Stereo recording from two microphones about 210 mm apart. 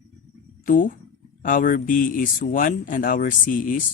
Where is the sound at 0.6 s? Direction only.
40° left (ahead or behind).